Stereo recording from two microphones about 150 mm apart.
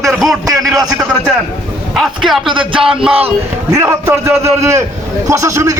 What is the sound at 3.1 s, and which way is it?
Speech, 40° right (ahead or behind).